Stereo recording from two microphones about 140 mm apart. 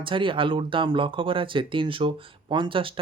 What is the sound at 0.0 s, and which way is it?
Speech, 35° right (ahead or behind).